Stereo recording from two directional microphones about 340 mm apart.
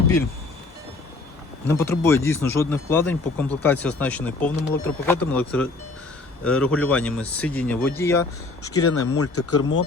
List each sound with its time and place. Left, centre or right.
1.6 s speech: centre
8.6 s speech: left